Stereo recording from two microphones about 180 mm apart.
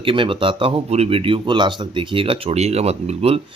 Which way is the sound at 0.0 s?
30° right (ahead or behind).